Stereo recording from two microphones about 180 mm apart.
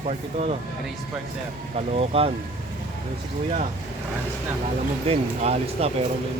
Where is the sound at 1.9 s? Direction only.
35° right (ahead or behind).